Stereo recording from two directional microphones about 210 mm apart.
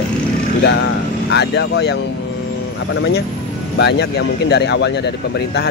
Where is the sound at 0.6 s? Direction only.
55° left (ahead or behind).